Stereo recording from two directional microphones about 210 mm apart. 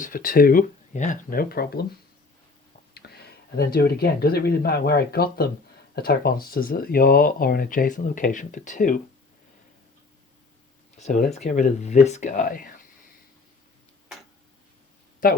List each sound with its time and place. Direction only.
0.0 s speech: 40° left (ahead or behind)
2.9 s speech: 50° left (ahead or behind)
10.9 s speech: 35° left (ahead or behind)